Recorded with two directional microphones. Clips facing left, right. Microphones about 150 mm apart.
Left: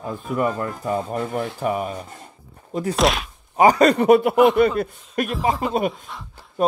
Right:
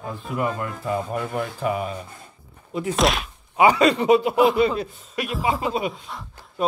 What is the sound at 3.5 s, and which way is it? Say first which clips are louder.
Speech: left 2 dB; 40° left (ahead or behind).